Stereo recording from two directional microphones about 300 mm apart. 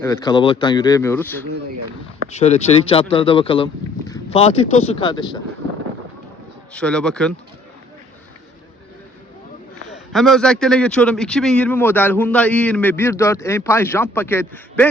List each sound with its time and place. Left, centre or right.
0.0 s speech: centre
2.3 s speech: left
6.7 s a man's voice: centre
9.9 s a man's voice: centre